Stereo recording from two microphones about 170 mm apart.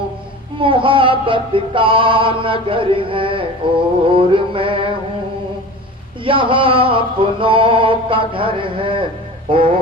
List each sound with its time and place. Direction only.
0.6 s music: 30° right (ahead or behind)
6.2 s music: 30° right (ahead or behind)